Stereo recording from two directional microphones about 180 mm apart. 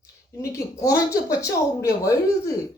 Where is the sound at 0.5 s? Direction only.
15° left (ahead or behind).